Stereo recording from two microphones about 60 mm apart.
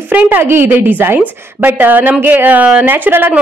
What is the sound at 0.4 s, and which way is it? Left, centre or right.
A woman's voice, right.